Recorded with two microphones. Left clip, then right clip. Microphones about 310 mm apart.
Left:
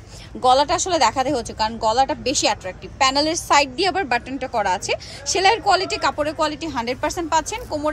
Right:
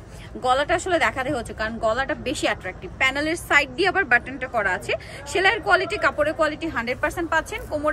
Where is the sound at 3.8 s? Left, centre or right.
Centre.